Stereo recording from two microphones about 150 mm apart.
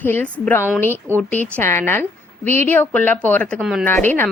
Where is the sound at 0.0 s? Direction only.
10° left (ahead or behind).